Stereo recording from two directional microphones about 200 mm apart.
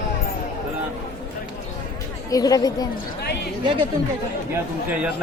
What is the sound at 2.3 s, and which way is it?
Speech, 20° left (ahead or behind).